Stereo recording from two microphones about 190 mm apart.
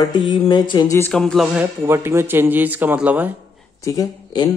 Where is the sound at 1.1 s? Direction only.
Centre (ahead or behind).